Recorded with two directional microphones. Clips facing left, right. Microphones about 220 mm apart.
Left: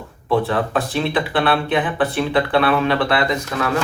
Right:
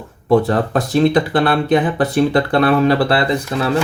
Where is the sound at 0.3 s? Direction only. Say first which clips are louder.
Right 5 dB; 40° right (ahead or behind).